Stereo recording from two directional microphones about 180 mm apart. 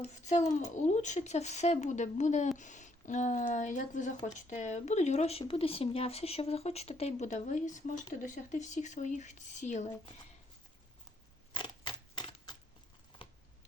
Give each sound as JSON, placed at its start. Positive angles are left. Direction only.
{"t": 0.0, "sound": "a child's voice", "side_deg": 40}
{"t": 11.5, "sound": "typewriter", "side_deg": 25}